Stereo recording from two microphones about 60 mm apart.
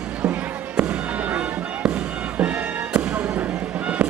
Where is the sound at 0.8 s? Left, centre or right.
Right.